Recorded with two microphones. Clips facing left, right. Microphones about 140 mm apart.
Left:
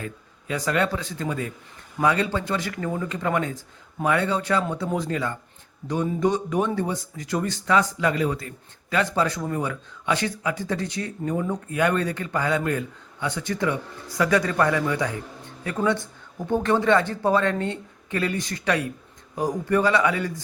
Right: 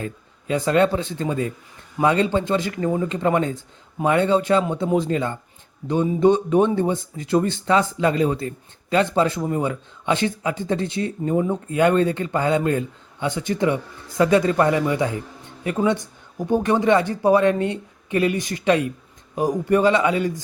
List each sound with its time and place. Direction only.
0.0 s a man's voice: 25° right (ahead or behind)